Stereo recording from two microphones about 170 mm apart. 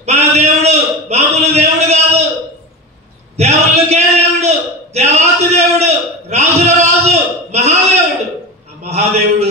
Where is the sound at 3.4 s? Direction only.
40° right (ahead or behind).